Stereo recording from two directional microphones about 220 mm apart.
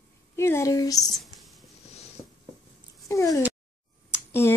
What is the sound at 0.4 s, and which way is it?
Speech, 15° left (ahead or behind).